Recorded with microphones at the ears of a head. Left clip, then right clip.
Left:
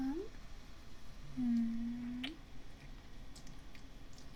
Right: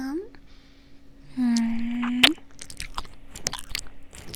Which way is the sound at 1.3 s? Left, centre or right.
Right.